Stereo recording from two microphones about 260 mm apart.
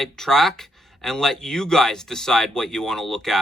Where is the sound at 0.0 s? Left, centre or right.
Centre.